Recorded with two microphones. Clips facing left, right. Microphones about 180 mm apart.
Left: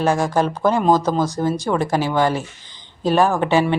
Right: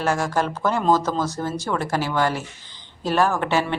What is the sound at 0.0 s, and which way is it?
A woman's voice, 15° left (ahead or behind).